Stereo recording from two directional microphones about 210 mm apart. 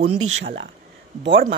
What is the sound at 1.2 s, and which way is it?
Speech, 55° right (ahead or behind).